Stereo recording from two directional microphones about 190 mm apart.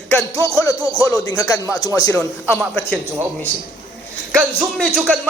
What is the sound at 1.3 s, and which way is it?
Speech, 5° left (ahead or behind).